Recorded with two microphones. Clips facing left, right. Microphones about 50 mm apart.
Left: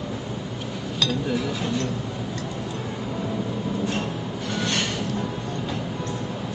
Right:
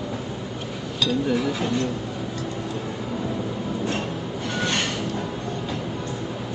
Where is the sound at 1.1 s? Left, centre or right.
Centre.